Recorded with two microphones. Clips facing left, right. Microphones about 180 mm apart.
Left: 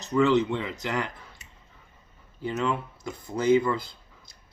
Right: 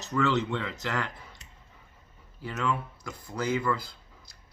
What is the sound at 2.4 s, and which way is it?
Speech, 25° left (ahead or behind).